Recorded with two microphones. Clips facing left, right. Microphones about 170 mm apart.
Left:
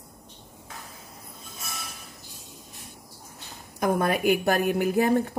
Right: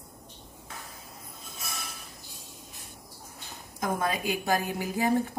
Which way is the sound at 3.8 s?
65° left (ahead or behind).